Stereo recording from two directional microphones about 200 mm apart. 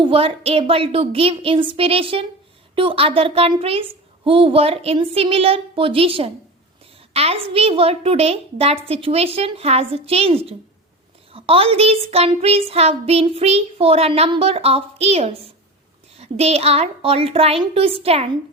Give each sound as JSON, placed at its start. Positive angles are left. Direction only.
{"t": 0.0, "sound": "a child's voice", "side_deg": -25}